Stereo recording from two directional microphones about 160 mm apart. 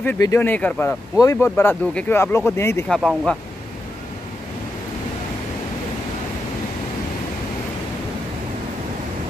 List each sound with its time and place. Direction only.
0.0 s speech: 15° left (ahead or behind)
2.9 s speech: centre (ahead or behind)